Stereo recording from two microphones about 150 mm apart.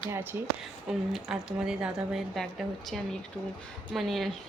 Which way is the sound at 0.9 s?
5° right (ahead or behind).